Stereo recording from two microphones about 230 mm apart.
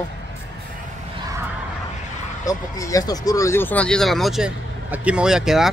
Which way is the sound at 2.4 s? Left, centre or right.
Centre.